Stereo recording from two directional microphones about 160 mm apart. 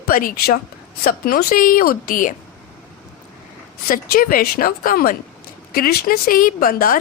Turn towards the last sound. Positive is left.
turn(degrees=65)  # may be behind; listen again after turning